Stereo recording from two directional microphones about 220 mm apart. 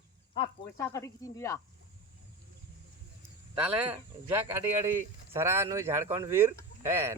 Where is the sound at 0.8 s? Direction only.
15° left (ahead or behind).